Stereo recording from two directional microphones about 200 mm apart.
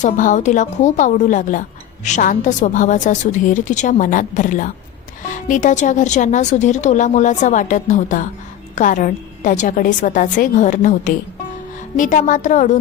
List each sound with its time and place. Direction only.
0.0 s speech: 40° left (ahead or behind)